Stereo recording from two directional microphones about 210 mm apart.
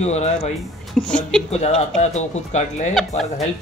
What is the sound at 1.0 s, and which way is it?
Speech, 5° left (ahead or behind).